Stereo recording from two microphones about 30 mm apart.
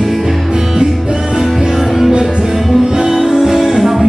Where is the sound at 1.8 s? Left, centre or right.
Centre.